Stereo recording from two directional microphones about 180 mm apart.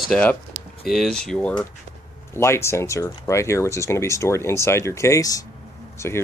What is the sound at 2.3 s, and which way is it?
Speech, 15° left (ahead or behind).